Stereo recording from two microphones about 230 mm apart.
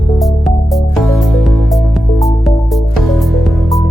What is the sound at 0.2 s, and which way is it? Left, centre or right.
Music, centre.